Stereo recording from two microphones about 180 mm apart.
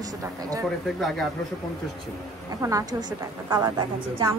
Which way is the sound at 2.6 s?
20° right (ahead or behind).